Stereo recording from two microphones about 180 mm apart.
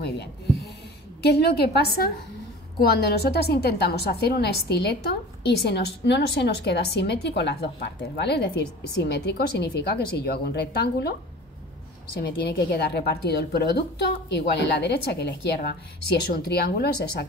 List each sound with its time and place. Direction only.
0.0 s a woman's voice: 65° left (ahead or behind)